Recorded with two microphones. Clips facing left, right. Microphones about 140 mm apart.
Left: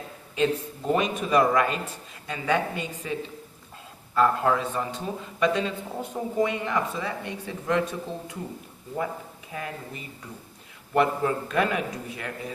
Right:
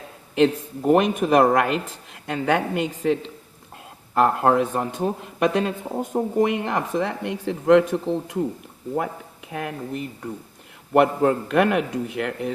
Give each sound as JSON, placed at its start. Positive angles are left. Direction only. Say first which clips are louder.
{"t": 0.3, "sound": "speech", "louder": "right 6 dB", "side_deg": -60}
{"t": 9.5, "sound": "speech", "louder": "right 7 dB", "side_deg": -65}